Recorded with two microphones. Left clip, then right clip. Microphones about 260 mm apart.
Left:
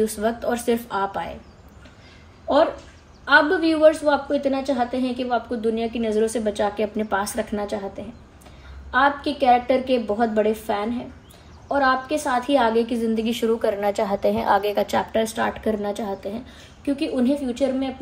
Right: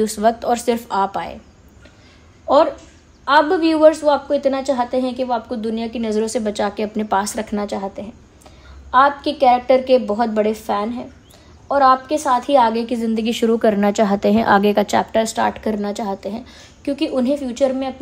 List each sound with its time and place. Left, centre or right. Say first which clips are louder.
0.0 s a woman's voice: right 6 dB; right
2.5 s a woman's voice: right 5 dB; right
8.9 s a woman's voice: right 5 dB; right